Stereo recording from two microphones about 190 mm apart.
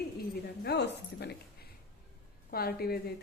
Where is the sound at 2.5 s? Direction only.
55° left (ahead or behind).